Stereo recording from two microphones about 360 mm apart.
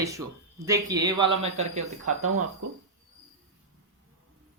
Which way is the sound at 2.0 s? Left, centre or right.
Right.